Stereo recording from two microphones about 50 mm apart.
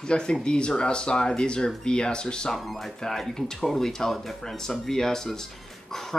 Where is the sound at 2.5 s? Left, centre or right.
Centre.